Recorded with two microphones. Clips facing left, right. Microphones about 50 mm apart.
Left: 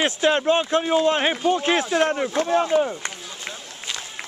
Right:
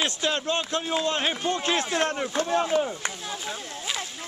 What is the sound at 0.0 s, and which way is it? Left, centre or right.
A man's voice, left.